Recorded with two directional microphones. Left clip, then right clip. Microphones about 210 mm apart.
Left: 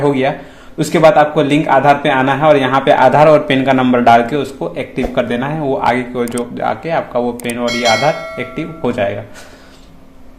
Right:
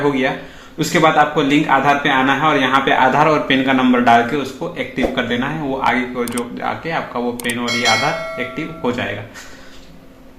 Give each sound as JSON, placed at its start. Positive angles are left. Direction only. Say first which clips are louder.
{"t": 0.1, "sound": "a man's voice", "louder": "left 4 dB", "side_deg": 60}
{"t": 7.3, "sound": "speech", "louder": "left 2 dB", "side_deg": 0}
{"t": 8.5, "sound": "a man's voice", "louder": "left 2 dB", "side_deg": 60}